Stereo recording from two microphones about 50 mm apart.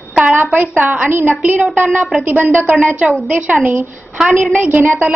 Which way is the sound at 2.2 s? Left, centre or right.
Right.